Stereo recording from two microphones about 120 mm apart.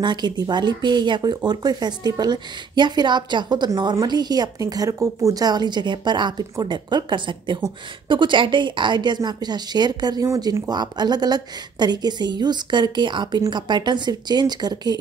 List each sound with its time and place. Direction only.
0.0 s speech: 35° right (ahead or behind)